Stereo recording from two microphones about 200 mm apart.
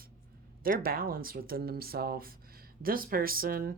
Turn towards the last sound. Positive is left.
turn(degrees=-45)  # may be behind; listen again after turning